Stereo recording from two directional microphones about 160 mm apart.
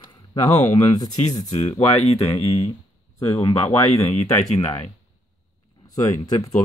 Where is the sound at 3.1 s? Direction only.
20° left (ahead or behind).